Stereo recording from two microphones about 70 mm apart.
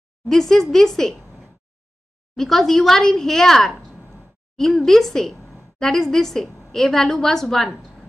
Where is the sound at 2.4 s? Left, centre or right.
Centre.